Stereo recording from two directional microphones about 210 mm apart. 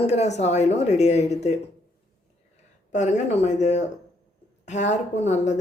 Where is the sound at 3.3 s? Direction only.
35° left (ahead or behind).